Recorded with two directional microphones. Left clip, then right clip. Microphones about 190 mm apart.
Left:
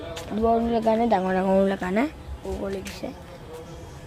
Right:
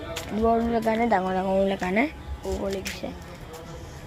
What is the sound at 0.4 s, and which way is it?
Speech, 15° left (ahead or behind).